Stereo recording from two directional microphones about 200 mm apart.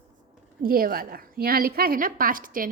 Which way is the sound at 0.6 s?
45° right (ahead or behind).